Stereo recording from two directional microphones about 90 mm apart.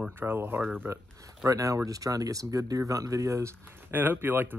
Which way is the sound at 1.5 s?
35° right (ahead or behind).